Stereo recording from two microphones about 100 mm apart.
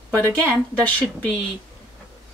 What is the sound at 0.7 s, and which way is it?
Speech, 15° left (ahead or behind).